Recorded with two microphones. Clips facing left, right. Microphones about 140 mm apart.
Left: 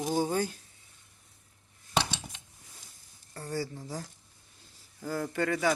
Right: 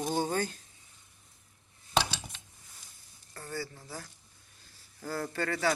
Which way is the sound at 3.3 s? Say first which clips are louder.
Left 4 dB; 35° left (ahead or behind).